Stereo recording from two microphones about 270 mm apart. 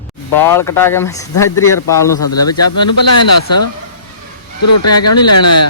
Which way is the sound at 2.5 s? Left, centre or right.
Left.